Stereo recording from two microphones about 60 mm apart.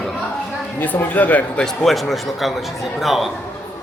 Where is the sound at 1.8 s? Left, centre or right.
Centre.